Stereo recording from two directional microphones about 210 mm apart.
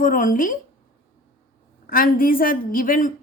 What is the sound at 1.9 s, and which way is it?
Speech, 40° left (ahead or behind).